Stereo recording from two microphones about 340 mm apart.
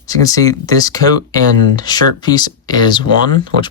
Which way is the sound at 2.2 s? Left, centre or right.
Centre.